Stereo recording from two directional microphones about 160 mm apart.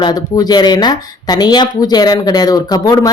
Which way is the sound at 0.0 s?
25° left (ahead or behind).